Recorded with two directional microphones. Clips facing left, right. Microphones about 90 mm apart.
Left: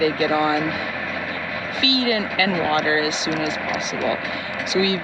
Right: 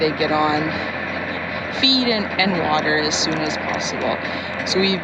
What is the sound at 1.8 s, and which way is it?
Speech, 25° right (ahead or behind).